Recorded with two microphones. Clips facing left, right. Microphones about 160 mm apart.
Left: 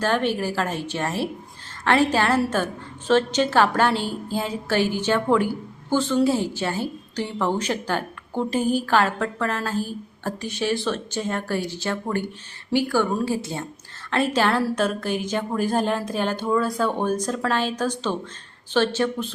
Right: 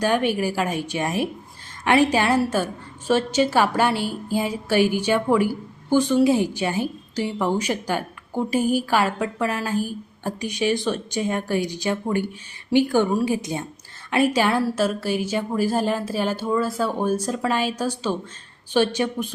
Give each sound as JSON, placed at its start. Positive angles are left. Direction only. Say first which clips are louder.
{"t": 0.0, "sound": "a woman's voice", "louder": "right 2 dB", "side_deg": -10}